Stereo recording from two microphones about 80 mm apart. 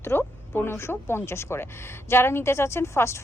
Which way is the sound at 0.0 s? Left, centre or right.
Left.